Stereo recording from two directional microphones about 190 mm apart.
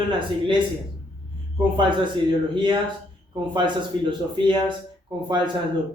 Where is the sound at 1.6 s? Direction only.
25° right (ahead or behind).